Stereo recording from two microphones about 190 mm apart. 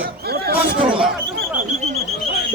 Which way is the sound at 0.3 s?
60° right (ahead or behind).